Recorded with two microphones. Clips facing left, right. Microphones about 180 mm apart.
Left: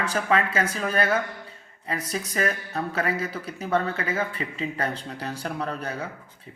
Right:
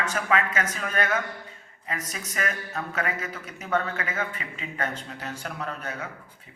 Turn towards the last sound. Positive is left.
turn(degrees=35)  # may be behind; listen again after turning